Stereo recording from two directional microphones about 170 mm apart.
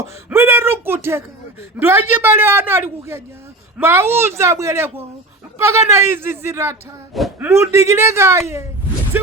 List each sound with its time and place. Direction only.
0.3 s a man's voice: 15° right (ahead or behind)
7.1 s speech: centre (ahead or behind)
7.3 s a man's voice: 15° right (ahead or behind)
9.1 s a sound: 10° right (ahead or behind)